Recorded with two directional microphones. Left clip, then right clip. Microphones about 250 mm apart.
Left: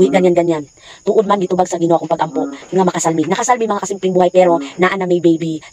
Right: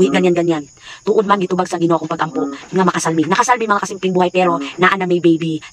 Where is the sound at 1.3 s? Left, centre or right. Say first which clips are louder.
Left 1 dB; centre.